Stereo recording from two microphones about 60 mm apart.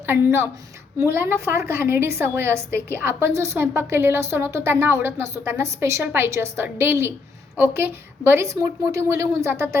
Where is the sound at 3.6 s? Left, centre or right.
Right.